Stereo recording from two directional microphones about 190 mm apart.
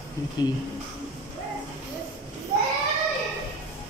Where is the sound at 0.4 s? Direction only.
20° left (ahead or behind).